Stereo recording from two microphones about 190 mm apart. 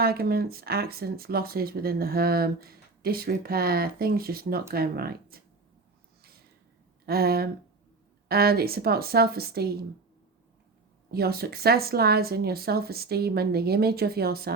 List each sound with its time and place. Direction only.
0.0 s speech: 55° right (ahead or behind)
7.0 s speech: 55° right (ahead or behind)
11.1 s speech: 55° right (ahead or behind)